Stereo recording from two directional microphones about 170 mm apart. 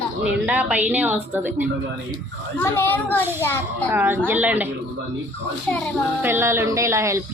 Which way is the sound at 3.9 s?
10° right (ahead or behind).